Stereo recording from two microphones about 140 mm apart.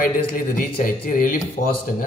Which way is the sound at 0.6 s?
90° left.